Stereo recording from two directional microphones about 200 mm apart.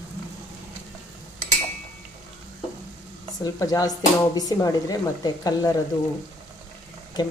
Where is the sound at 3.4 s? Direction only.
15° left (ahead or behind).